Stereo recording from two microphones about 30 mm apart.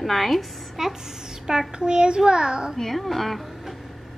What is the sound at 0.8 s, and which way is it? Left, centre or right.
A child's voice, centre.